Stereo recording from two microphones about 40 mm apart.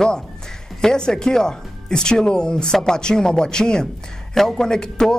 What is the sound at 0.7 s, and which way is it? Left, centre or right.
Speech, centre.